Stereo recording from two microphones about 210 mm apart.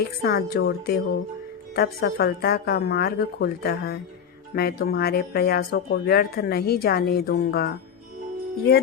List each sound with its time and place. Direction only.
0.0 s speech: 50° left (ahead or behind)